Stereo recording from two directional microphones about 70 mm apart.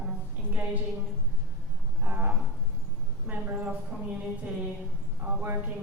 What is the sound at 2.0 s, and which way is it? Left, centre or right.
A woman's voice, right.